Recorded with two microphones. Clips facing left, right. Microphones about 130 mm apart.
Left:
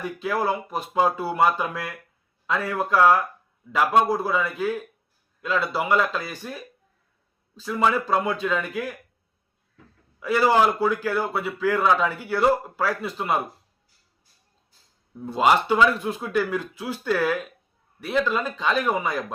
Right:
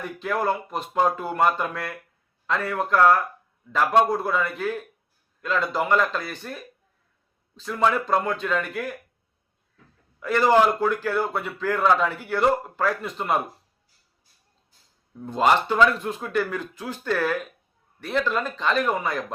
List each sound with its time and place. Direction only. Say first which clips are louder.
0.0 s a man's voice: left 1 dB; 5° left (ahead or behind)
7.6 s a man's voice: even; 5° left (ahead or behind)
10.2 s a man's voice: right 1 dB; 10° left (ahead or behind)
15.2 s a man's voice: left 1 dB; 5° left (ahead or behind)